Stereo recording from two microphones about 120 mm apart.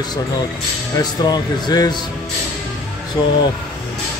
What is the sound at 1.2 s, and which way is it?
Speech, 35° left (ahead or behind).